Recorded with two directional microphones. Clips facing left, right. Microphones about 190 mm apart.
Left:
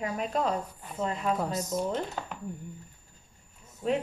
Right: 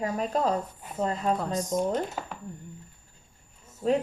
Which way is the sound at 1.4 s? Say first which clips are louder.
Right 1 dB; 10° left (ahead or behind).